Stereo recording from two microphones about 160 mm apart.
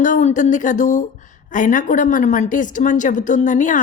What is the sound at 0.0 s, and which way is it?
A woman's voice, 50° left (ahead or behind).